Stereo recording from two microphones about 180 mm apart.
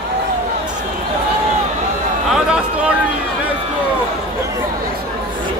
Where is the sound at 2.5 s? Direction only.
5° right (ahead or behind).